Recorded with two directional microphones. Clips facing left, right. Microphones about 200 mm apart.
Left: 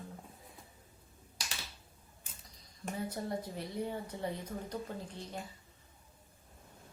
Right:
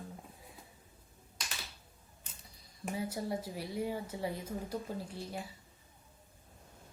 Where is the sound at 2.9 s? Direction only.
5° right (ahead or behind).